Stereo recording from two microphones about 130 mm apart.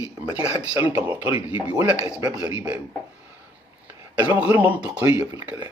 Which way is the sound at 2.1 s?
30° right (ahead or behind).